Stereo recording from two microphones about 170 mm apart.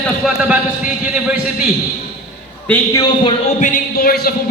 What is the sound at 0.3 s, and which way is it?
A man's voice, 10° right (ahead or behind).